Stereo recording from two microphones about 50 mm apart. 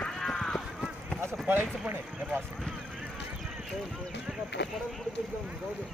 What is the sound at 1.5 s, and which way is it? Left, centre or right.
Speech, right.